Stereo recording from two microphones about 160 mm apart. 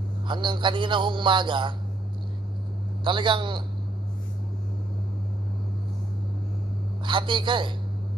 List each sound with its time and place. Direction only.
0.3 s a man's voice: 30° right (ahead or behind)
3.0 s a man's voice: 30° right (ahead or behind)
7.1 s a man's voice: 30° right (ahead or behind)